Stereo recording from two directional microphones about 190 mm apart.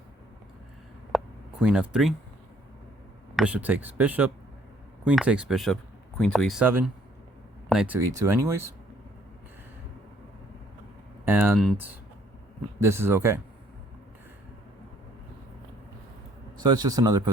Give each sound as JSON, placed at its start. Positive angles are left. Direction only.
{"t": 1.1, "sound": "a sound", "side_deg": 0}
{"t": 1.6, "sound": "speech", "side_deg": -5}
{"t": 3.3, "sound": "speech", "side_deg": -5}
{"t": 11.3, "sound": "speech", "side_deg": -10}
{"t": 11.5, "sound": "speech", "side_deg": 0}
{"t": 12.8, "sound": "speech", "side_deg": -15}
{"t": 16.6, "sound": "speech", "side_deg": -20}